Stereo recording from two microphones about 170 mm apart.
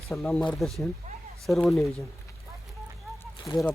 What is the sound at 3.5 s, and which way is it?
Speech, 20° left (ahead or behind).